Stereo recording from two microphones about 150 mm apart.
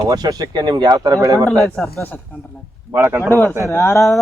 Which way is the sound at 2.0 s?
10° left (ahead or behind).